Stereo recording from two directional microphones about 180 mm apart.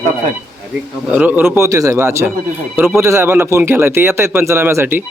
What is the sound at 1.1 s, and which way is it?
Speech, 10° right (ahead or behind).